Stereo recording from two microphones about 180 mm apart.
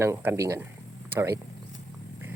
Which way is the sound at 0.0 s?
15° right (ahead or behind).